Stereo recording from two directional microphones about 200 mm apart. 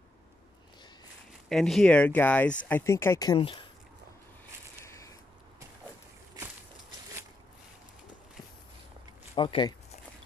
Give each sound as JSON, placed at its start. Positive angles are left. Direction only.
{"t": 1.5, "sound": "speech", "side_deg": 0}
{"t": 9.3, "sound": "speech", "side_deg": 25}